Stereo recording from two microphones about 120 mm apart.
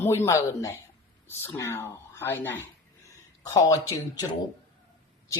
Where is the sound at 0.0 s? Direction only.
20° left (ahead or behind).